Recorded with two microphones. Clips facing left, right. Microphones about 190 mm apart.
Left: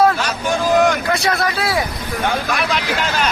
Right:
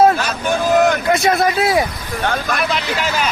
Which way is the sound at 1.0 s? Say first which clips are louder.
Right 4 dB; 20° right (ahead or behind).